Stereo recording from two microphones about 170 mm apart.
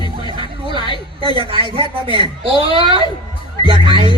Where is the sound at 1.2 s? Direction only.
30° right (ahead or behind).